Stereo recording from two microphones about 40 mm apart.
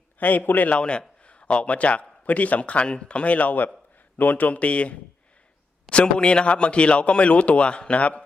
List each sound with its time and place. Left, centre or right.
0.2 s a man's voice: left
0.8 s a man's voice: left